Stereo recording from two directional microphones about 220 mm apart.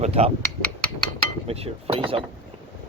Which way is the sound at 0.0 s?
30° right (ahead or behind).